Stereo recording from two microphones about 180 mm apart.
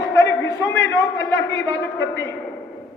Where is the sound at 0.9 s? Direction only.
20° left (ahead or behind).